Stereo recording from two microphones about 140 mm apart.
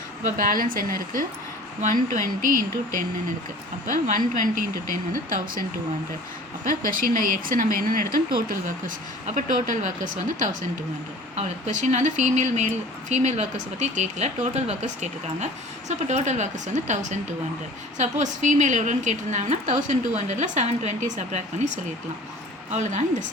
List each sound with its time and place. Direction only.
0.3 s speech: 85° right
1.8 s speech: 70° right (ahead or behind)
4.0 s speech: 70° right (ahead or behind)
6.7 s speech: 80° right
9.2 s speech: 65° right (ahead or behind)
22.7 s speech: 60° right (ahead or behind)